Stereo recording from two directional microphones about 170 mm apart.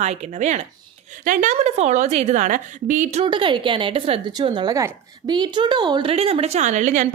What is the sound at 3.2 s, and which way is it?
Speech, 30° right (ahead or behind).